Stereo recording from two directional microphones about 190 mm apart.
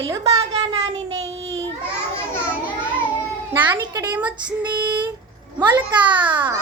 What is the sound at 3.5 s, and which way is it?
Speech, 15° right (ahead or behind).